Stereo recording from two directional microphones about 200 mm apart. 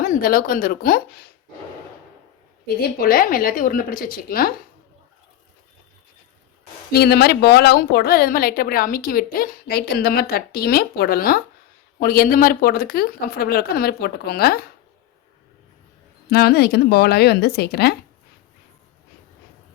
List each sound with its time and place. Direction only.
0.0 s speech: 45° left (ahead or behind)
2.8 s speech: 45° left (ahead or behind)
6.9 s speech: 55° left (ahead or behind)
16.3 s speech: 50° left (ahead or behind)